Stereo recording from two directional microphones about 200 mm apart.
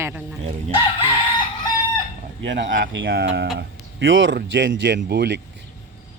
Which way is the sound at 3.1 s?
55° right (ahead or behind).